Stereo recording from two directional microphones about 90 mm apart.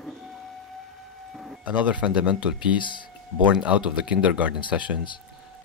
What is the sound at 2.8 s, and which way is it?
Speech, 60° left (ahead or behind).